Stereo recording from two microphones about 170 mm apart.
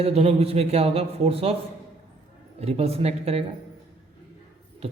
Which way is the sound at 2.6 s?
35° right (ahead or behind).